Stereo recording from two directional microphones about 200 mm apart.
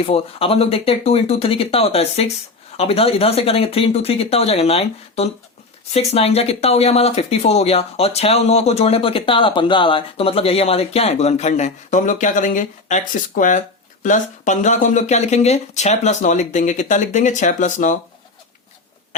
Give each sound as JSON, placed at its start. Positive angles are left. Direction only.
{"t": 0.0, "sound": "speech", "side_deg": 30}